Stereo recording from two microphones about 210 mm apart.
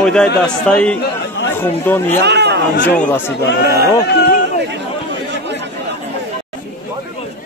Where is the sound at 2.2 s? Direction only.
55° right (ahead or behind).